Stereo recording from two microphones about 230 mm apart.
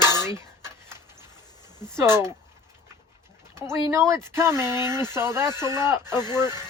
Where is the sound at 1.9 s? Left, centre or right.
Centre.